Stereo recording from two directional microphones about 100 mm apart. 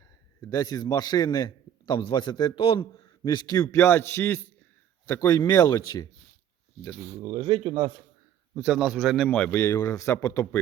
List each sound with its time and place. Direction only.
0.4 s a man's voice: 35° left (ahead or behind); by 2.5 s 50° left (ahead or behind)
2.6 s a man's voice: 70° left (ahead or behind)
3.2 s a man's voice: 45° left (ahead or behind)
3.8 s a man's voice: 25° left (ahead or behind)
5.3 s a man's voice: 40° left (ahead or behind)
7.0 s speech: 25° right (ahead or behind)
7.3 s speech: 50° right (ahead or behind)
8.5 s a man's voice: 5° right (ahead or behind)
9.5 s speech: 30° left (ahead or behind)